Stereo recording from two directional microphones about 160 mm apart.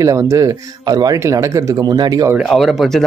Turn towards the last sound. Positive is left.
turn(degrees=0)  # may be behind; listen again after turning